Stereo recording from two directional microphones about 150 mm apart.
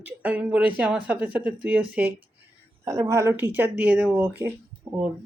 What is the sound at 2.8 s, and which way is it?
Speech, 20° right (ahead or behind).